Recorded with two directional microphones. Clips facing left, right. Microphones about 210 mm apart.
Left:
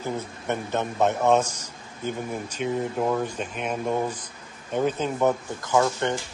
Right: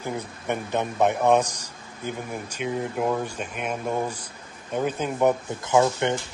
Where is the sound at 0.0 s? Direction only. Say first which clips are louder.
Left 1 dB; 15° right (ahead or behind).